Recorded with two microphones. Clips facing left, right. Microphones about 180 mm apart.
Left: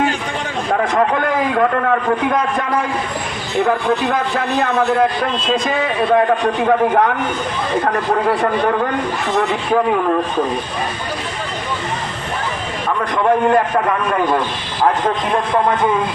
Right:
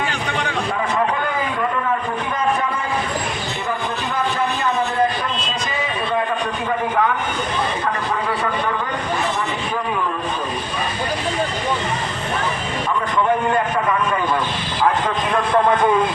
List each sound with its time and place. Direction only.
0.7 s a sound: 60° left (ahead or behind)
3.6 s a man's voice: 65° left (ahead or behind)
13.5 s a man's voice: 50° left (ahead or behind)